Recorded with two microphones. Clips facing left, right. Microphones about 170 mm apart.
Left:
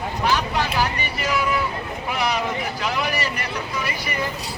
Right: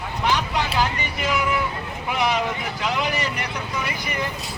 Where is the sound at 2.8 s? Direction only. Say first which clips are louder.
Right 2 dB; 20° right (ahead or behind).